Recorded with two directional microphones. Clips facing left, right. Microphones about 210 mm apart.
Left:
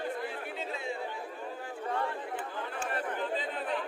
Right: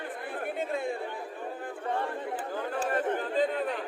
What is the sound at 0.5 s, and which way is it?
Chatter, 55° right (ahead or behind).